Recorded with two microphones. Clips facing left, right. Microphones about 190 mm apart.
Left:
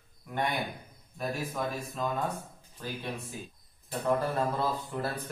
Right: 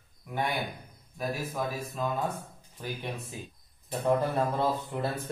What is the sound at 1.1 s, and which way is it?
Speech, centre (ahead or behind).